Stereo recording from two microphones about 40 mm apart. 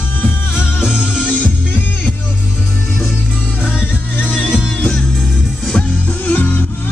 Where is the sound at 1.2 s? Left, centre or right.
Left.